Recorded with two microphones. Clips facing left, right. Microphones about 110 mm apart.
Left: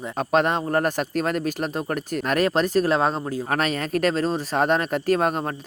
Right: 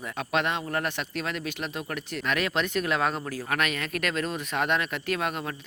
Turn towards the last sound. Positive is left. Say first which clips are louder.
# left 8 dB
turn(degrees=40)  # may be behind; listen again after turning